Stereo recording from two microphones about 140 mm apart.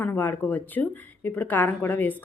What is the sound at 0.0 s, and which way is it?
A woman's voice, 15° left (ahead or behind).